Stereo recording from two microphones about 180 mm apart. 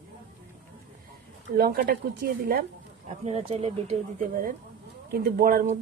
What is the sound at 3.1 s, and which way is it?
Speech, 35° right (ahead or behind).